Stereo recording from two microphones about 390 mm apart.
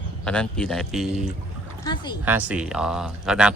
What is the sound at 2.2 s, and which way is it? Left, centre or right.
Speech, centre.